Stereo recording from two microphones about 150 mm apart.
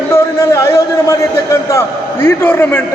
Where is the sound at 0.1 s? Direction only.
20° left (ahead or behind).